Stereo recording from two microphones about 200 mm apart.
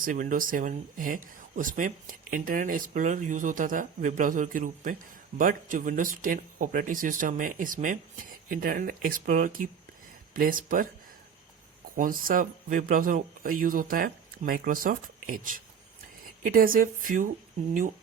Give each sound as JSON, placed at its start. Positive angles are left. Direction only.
{"t": 0.0, "sound": "speech", "side_deg": -40}
{"t": 11.9, "sound": "speech", "side_deg": -45}